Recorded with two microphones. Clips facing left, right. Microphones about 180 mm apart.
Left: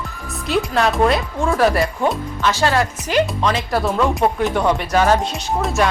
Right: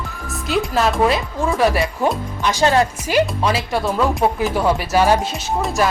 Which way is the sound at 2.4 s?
20° right (ahead or behind).